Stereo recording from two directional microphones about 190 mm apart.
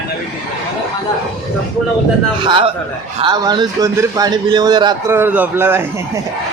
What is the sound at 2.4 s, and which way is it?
A man's voice, 25° right (ahead or behind).